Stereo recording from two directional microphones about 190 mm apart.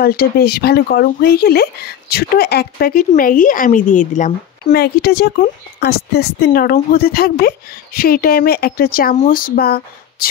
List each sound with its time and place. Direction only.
0.0 s speech: 50° left (ahead or behind)
5.0 s speech: 55° left (ahead or behind)